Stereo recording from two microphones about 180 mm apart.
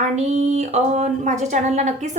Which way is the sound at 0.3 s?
40° right (ahead or behind).